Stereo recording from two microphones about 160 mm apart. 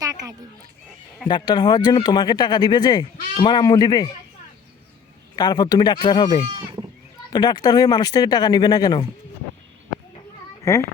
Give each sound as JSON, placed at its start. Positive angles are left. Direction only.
{"t": 0.0, "sound": "a sound", "side_deg": -20}
{"t": 1.3, "sound": "speech", "side_deg": 25}
{"t": 5.4, "sound": "speech", "side_deg": 25}
{"t": 10.6, "sound": "a child's voice", "side_deg": 20}